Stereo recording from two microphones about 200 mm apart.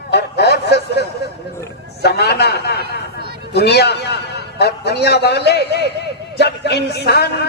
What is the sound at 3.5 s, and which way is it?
A man's voice, 55° left (ahead or behind).